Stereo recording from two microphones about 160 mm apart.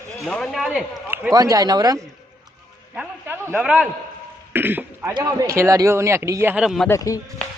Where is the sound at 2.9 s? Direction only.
5° right (ahead or behind).